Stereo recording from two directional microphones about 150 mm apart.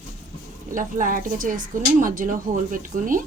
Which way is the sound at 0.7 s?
60° right (ahead or behind).